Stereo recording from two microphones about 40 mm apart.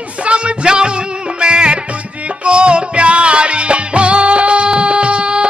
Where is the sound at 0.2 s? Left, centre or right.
Right.